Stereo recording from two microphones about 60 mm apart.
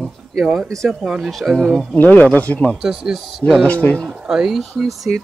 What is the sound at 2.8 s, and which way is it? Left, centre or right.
Speech, centre.